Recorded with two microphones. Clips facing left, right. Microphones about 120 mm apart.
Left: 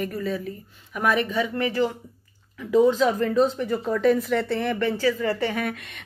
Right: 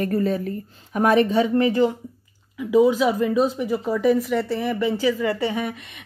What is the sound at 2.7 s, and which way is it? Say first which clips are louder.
Speech: right 1 dB; 10° right (ahead or behind).